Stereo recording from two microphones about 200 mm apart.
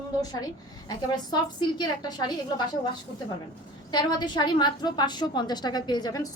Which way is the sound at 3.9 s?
20° left (ahead or behind).